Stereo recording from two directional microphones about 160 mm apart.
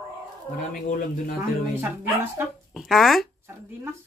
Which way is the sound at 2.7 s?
Centre (ahead or behind).